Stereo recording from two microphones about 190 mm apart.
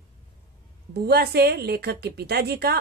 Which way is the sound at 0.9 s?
55° right (ahead or behind).